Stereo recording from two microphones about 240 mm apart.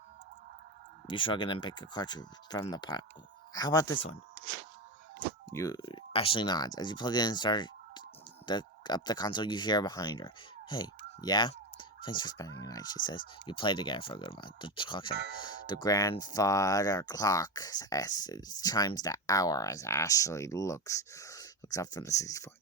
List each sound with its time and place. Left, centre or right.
1.0 s speech: centre
5.5 s speech: centre